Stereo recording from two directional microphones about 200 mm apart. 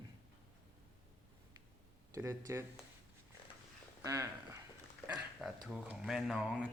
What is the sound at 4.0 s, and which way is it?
Speech, 15° right (ahead or behind).